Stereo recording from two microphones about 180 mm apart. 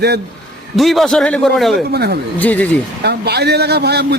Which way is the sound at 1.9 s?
60° right (ahead or behind).